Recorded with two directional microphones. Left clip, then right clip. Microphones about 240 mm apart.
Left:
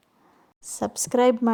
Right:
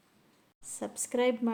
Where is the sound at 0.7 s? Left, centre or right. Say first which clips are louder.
Left 10 dB; left.